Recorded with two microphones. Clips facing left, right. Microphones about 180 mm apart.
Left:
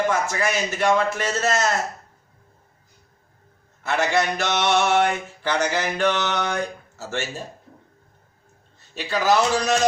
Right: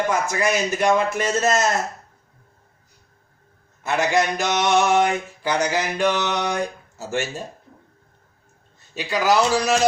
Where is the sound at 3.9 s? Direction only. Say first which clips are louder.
Right 1 dB; 15° right (ahead or behind).